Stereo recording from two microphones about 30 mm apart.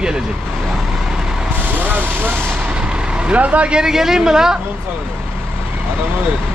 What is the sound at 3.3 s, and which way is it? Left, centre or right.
Speech, right.